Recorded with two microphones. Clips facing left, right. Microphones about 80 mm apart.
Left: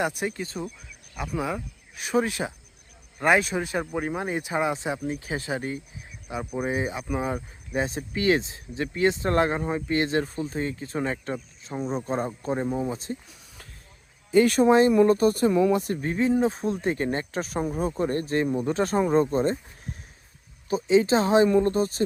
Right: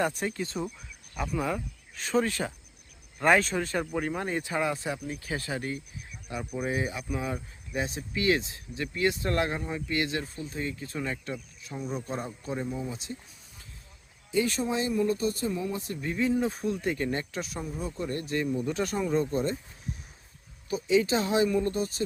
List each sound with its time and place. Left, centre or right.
0.2 s speech: centre
6.4 s speech: left
14.3 s speech: left
16.0 s speech: left
20.7 s speech: left